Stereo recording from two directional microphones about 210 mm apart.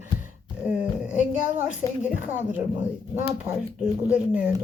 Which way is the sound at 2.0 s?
5° right (ahead or behind).